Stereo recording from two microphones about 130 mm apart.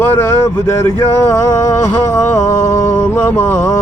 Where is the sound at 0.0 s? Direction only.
15° left (ahead or behind).